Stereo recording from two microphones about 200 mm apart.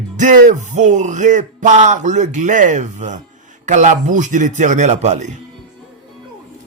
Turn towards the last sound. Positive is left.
turn(degrees=-35)  # may be behind; listen again after turning